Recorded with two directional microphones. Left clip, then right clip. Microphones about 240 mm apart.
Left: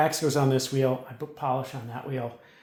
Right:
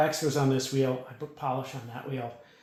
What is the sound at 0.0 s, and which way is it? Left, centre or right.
Speech, left.